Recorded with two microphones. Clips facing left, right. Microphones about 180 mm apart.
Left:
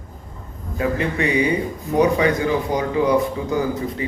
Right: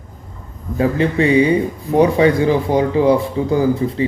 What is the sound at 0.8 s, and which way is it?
Speech, 30° right (ahead or behind).